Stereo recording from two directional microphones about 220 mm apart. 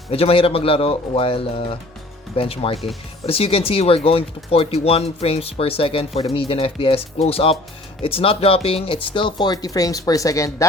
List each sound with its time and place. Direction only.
0.1 s speech: 25° left (ahead or behind)